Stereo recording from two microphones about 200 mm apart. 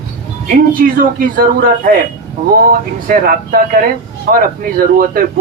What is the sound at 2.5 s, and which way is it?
Speech, 50° right (ahead or behind).